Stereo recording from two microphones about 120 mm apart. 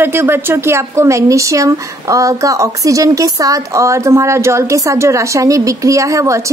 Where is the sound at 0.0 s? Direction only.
20° right (ahead or behind).